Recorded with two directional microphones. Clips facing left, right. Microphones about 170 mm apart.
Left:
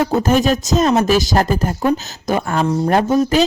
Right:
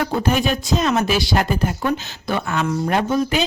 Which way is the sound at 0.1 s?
40° left (ahead or behind).